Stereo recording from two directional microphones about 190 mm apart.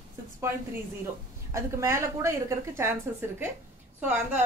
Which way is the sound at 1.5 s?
15° right (ahead or behind).